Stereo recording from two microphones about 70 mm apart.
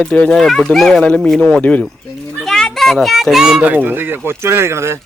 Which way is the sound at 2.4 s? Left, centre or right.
Centre.